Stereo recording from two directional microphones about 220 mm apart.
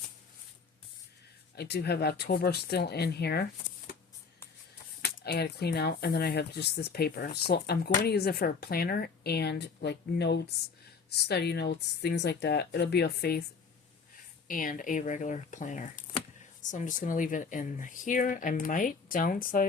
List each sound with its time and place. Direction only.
1.5 s speech: 50° left (ahead or behind)
5.0 s speech: 45° left (ahead or behind)
14.4 s speech: 40° left (ahead or behind)